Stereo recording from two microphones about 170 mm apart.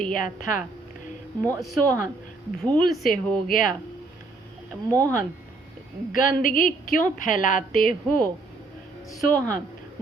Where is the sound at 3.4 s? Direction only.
55° left (ahead or behind).